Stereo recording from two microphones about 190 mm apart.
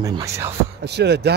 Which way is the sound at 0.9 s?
60° right (ahead or behind).